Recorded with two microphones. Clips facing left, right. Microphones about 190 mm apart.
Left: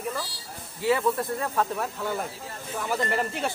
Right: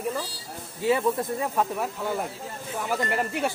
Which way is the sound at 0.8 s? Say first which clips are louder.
Right 1 dB; 20° right (ahead or behind).